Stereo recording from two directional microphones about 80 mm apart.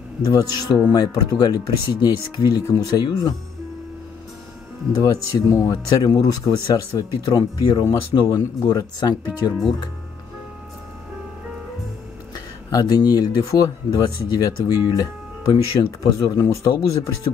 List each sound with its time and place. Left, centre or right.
0.2 s speech: left
5.0 s speech: left
12.7 s speech: left
16.3 s speech: left